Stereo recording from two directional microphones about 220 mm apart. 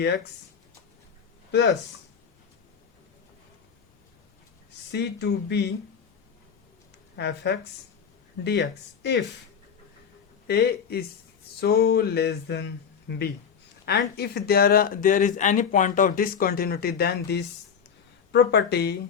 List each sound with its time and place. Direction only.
4.9 s speech: 50° left (ahead or behind)
7.2 s speech: 50° left (ahead or behind)
10.4 s speech: 45° left (ahead or behind)